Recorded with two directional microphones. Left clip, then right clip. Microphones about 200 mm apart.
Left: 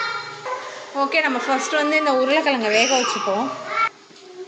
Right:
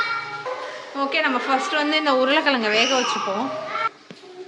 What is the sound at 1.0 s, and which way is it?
A woman's voice, 20° left (ahead or behind).